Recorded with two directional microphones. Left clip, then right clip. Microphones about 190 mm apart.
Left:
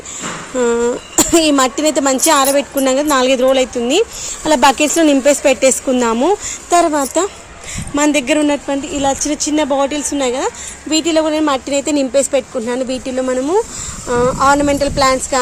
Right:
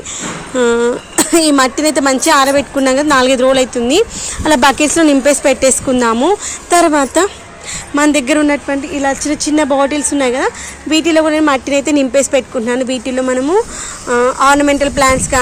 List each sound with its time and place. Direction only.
0.5 s speech: 15° left (ahead or behind)
6.7 s speech: centre (ahead or behind)
7.9 s speech: 15° left (ahead or behind)